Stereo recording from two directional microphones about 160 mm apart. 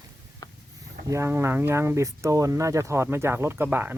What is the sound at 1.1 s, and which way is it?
Speech, 15° right (ahead or behind).